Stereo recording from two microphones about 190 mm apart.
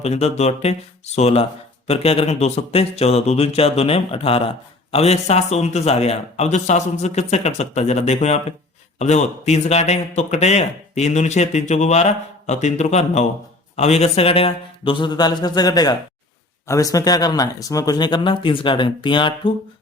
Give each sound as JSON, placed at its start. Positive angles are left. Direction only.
{"t": 0.0, "sound": "speech", "side_deg": 35}